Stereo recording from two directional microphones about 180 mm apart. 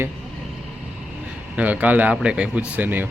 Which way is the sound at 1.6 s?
10° right (ahead or behind).